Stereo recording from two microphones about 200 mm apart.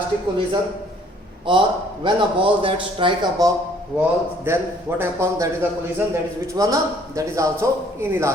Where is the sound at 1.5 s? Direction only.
25° right (ahead or behind).